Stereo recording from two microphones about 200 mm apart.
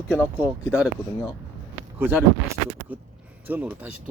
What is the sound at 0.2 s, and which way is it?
Speech, 5° right (ahead or behind).